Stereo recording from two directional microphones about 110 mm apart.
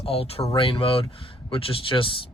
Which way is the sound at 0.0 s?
60° left (ahead or behind).